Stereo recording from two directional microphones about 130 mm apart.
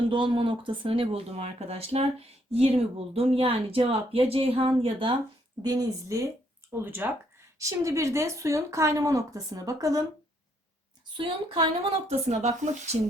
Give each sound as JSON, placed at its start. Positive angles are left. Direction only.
{"t": 0.1, "sound": "speech", "side_deg": -40}
{"t": 5.6, "sound": "speech", "side_deg": -30}
{"t": 6.7, "sound": "speech", "side_deg": -15}
{"t": 11.2, "sound": "a woman's voice", "side_deg": -35}
{"t": 12.0, "sound": "speech", "side_deg": -60}